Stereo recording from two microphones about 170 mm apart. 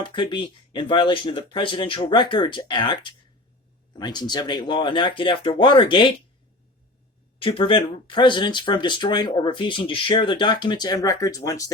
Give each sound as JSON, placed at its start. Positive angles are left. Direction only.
{"t": 0.0, "sound": "speech", "side_deg": 30}
{"t": 7.3, "sound": "speech", "side_deg": 30}